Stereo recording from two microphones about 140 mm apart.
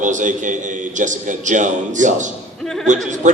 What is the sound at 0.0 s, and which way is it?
A man's voice, 65° right (ahead or behind).